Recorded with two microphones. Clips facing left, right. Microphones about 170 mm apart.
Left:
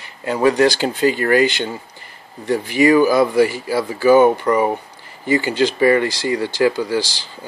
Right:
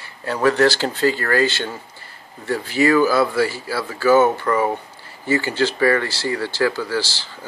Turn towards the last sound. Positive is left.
turn(degrees=15)  # may be behind; listen again after turning